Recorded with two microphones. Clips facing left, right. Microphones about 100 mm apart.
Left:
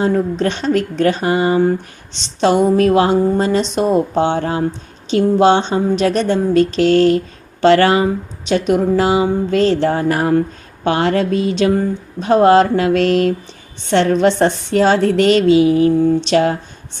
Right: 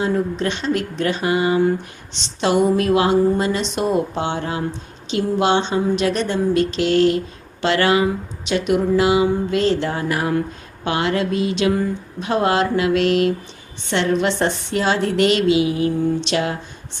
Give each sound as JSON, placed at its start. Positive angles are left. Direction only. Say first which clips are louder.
{"t": 0.0, "sound": "speech", "louder": "left 4 dB", "side_deg": 40}